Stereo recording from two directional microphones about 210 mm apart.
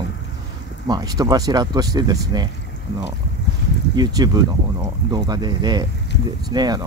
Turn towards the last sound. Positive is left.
turn(degrees=-20)  # may be behind; listen again after turning